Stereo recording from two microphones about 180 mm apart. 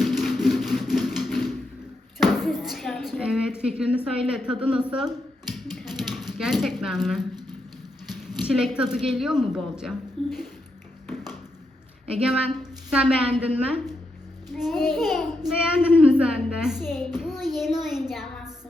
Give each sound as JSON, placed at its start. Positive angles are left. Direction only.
{"t": 0.0, "sound": "music", "side_deg": 0}
{"t": 2.1, "sound": "a sound", "side_deg": 0}
{"t": 3.6, "sound": "speech", "side_deg": -5}
{"t": 5.8, "sound": "a sound", "side_deg": 0}
{"t": 8.4, "sound": "speech", "side_deg": -5}
{"t": 12.0, "sound": "speech", "side_deg": -5}
{"t": 16.8, "sound": "a child's voice", "side_deg": 10}
{"t": 17.1, "sound": "child singing", "side_deg": 0}
{"t": 17.6, "sound": "speech", "side_deg": 0}